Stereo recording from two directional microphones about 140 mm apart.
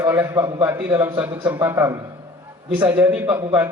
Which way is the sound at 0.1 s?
15° right (ahead or behind).